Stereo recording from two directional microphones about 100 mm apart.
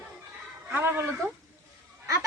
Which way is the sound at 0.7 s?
20° right (ahead or behind).